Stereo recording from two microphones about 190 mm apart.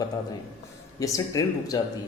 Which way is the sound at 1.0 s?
15° left (ahead or behind).